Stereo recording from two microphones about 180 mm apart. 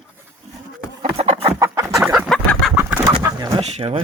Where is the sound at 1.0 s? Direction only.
35° right (ahead or behind).